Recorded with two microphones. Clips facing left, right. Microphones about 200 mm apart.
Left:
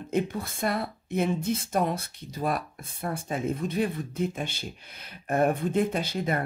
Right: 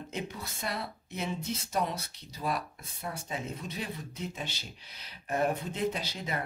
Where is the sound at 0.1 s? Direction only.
50° left (ahead or behind).